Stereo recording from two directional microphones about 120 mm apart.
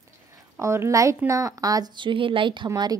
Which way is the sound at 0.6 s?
25° right (ahead or behind).